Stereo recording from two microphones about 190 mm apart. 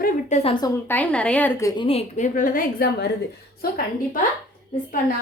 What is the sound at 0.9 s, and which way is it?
Speech, 5° left (ahead or behind).